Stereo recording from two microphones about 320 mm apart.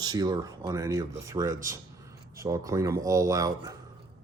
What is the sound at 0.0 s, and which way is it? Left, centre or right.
Speech, centre.